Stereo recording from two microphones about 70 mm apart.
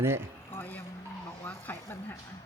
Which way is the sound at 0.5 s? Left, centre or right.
Left.